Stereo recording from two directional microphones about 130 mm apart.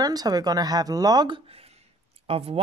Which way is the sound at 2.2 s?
50° right (ahead or behind).